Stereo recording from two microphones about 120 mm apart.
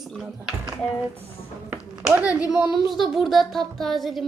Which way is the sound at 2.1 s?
10° right (ahead or behind).